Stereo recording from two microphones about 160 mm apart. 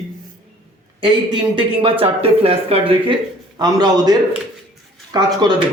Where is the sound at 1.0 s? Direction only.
30° right (ahead or behind).